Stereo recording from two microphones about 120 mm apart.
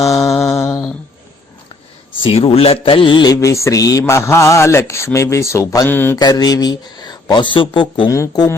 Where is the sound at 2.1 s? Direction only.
50° left (ahead or behind).